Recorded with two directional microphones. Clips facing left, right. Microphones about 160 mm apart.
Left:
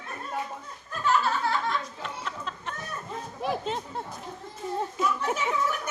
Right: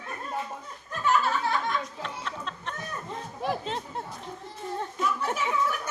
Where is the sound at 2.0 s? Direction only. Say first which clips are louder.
Even; 5° left (ahead or behind).